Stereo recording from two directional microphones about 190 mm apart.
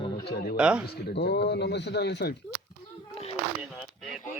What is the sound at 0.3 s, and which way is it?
Speech, 55° left (ahead or behind).